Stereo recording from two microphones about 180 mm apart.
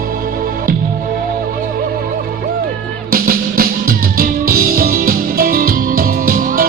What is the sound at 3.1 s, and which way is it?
Music, 55° right (ahead or behind).